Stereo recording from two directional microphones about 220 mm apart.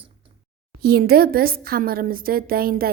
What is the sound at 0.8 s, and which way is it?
A woman's voice, 45° right (ahead or behind).